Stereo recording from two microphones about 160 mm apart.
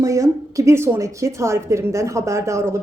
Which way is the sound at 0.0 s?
20° right (ahead or behind).